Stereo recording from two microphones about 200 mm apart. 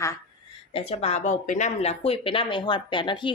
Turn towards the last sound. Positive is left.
turn(degrees=25)  # may be behind; listen again after turning